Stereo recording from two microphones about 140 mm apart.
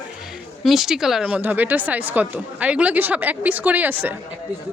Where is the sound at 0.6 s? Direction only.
Centre (ahead or behind).